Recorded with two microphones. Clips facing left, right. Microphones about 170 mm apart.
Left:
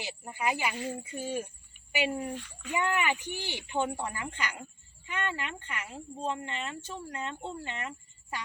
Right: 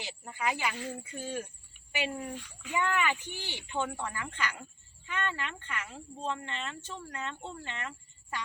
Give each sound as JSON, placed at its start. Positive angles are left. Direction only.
{"t": 0.0, "sound": "speech", "side_deg": 10}
{"t": 2.3, "sound": "a child's voice", "side_deg": -5}
{"t": 2.7, "sound": "speech", "side_deg": 15}